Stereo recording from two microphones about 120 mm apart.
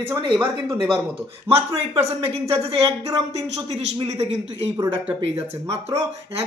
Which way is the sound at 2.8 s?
25° right (ahead or behind).